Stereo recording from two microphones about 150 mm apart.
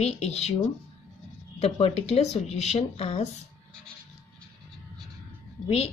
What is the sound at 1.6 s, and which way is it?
A woman's voice, 45° left (ahead or behind).